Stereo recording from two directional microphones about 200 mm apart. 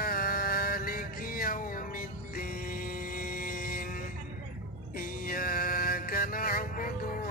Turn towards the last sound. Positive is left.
turn(degrees=45)  # may be behind; listen again after turning